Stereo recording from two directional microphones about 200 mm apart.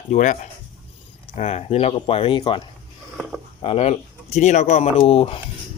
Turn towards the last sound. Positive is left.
turn(degrees=30)  # may be behind; listen again after turning